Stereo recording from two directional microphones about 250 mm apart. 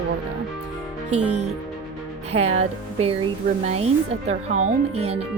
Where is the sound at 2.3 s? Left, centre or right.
Right.